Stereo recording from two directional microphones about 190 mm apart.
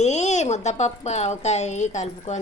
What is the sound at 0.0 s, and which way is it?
Speech, 35° left (ahead or behind).